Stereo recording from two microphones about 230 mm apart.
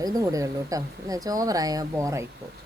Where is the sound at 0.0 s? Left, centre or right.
Centre.